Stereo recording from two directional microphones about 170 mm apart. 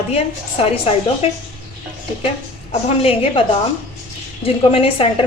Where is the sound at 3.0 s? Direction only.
35° left (ahead or behind).